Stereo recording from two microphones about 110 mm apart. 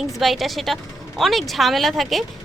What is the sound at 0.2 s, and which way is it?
Speech, centre (ahead or behind).